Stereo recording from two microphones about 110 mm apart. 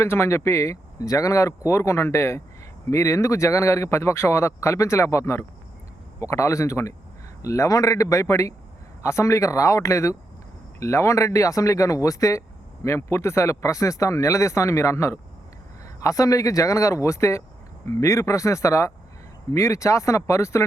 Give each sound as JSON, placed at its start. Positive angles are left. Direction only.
{"t": 0.0, "sound": "speech", "side_deg": 25}